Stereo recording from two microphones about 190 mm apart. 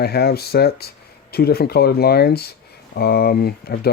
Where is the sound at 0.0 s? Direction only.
55° left (ahead or behind).